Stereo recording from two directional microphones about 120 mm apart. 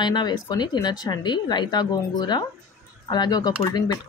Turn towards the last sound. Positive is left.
turn(degrees=35)  # may be behind; listen again after turning